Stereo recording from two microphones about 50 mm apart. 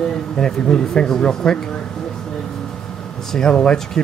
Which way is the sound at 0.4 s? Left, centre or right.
Centre.